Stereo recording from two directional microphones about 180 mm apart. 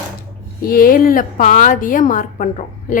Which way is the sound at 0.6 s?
50° left (ahead or behind).